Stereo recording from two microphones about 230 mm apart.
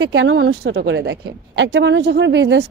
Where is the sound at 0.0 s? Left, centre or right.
Right.